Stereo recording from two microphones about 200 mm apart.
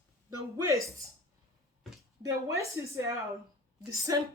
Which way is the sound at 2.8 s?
15° right (ahead or behind).